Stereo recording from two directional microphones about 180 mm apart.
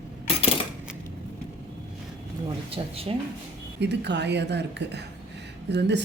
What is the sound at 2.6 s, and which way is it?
Speech, 35° right (ahead or behind).